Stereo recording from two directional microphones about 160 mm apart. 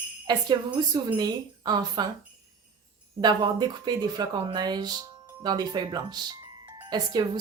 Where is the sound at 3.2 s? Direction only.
25° right (ahead or behind).